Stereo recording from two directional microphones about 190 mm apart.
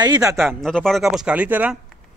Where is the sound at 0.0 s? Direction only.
20° right (ahead or behind).